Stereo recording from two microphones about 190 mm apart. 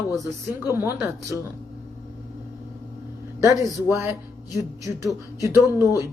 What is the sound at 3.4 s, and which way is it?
Speech, 10° right (ahead or behind).